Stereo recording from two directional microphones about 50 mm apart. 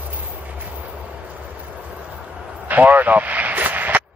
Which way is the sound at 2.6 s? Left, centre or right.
Right.